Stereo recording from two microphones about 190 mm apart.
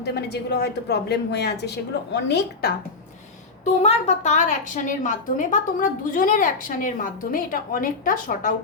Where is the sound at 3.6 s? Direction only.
35° left (ahead or behind).